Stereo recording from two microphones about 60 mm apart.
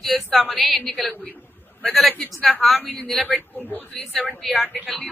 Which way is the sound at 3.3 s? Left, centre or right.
Left.